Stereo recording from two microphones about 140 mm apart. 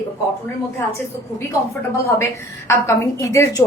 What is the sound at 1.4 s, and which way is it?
A woman's voice, 20° left (ahead or behind).